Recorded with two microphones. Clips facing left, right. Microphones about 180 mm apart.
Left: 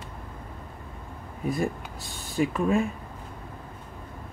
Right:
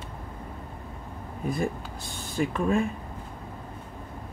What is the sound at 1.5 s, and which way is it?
Speech, centre (ahead or behind).